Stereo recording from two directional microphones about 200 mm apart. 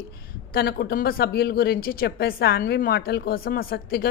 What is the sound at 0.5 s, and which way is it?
A woman's voice, 50° left (ahead or behind).